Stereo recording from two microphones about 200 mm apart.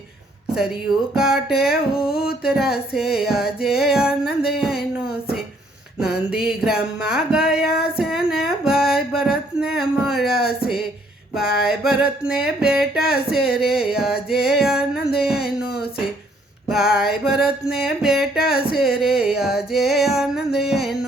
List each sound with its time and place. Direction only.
1.1 s music: 5° right (ahead or behind)
2.0 s a sound: 50° left (ahead or behind)
2.4 s music: 5° right (ahead or behind)
6.0 s music: 5° right (ahead or behind)
7.6 s female singing: 50° left (ahead or behind)
7.9 s a sound: 5° right (ahead or behind)
11.3 s music: 5° right (ahead or behind)